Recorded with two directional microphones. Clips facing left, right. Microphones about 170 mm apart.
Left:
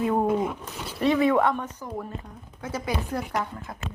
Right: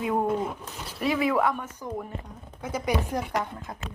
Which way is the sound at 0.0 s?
5° right (ahead or behind).